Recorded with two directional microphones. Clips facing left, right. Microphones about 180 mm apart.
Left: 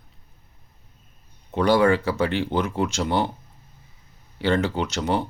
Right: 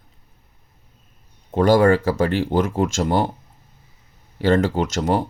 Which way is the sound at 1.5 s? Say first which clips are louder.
Right 4 dB; 45° right (ahead or behind).